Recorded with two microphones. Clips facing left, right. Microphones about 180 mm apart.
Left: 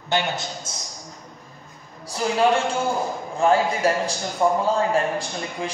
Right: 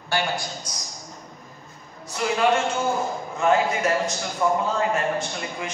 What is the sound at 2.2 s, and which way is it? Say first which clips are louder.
A man's voice: left 1 dB; 35° left (ahead or behind).